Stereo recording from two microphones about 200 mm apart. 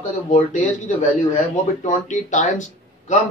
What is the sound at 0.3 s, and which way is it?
A man's voice, 40° left (ahead or behind).